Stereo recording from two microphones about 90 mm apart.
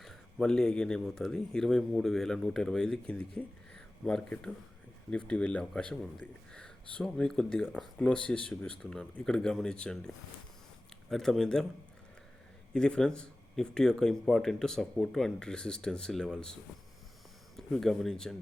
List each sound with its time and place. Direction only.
0.0 s speech: 5° left (ahead or behind)
7.6 s speech: 5° right (ahead or behind)
7.9 s speech: 10° left (ahead or behind)
11.1 s speech: 5° left (ahead or behind)
12.7 s speech: 10° left (ahead or behind)
17.6 s speech: 5° left (ahead or behind)